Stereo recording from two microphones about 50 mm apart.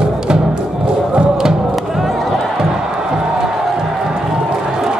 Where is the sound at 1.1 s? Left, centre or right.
Centre.